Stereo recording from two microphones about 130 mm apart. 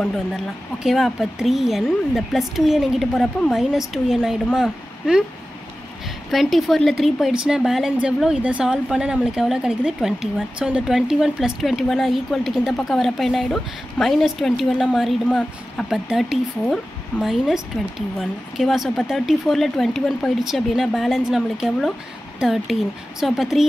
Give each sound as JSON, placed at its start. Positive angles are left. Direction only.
{"t": 0.8, "sound": "a woman's voice", "side_deg": 0}
{"t": 6.3, "sound": "a woman's voice", "side_deg": 0}